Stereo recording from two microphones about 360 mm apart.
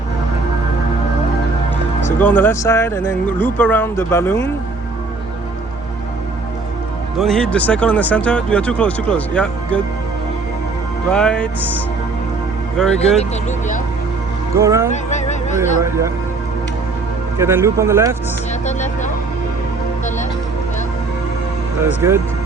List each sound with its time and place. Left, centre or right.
2.1 s speech: centre
7.2 s speech: centre
11.1 s speech: centre
12.7 s speech: centre
14.5 s speech: centre
15.1 s a sound: centre
15.8 s speech: centre
17.3 s speech: centre
18.6 s music: centre
22.0 s speech: centre